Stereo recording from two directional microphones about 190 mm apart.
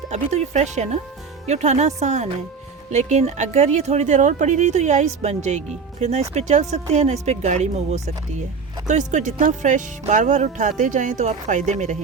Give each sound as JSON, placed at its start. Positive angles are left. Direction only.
{"t": 0.1, "sound": "speech", "side_deg": -35}